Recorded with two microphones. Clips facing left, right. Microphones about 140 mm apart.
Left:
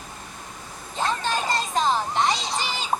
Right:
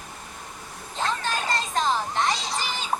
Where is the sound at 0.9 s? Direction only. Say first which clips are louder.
Left 2 dB; 15° left (ahead or behind).